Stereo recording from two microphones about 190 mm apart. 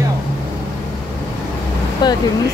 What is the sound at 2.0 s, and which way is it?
Speech, 20° left (ahead or behind).